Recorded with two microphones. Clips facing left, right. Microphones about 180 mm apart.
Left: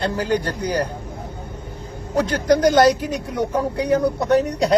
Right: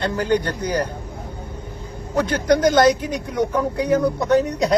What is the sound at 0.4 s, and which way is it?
Speech, 30° left (ahead or behind).